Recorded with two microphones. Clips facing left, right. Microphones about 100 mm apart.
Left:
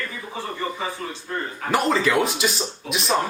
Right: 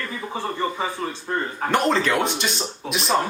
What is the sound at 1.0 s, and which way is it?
Speech, 35° right (ahead or behind).